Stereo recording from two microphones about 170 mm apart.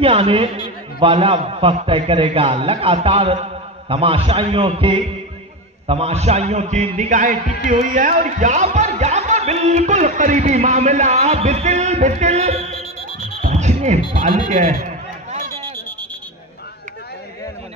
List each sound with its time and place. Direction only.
0.0 s a man's voice: 35° right (ahead or behind)
13.4 s a sound: 45° right (ahead or behind)
14.1 s speech: 45° right (ahead or behind)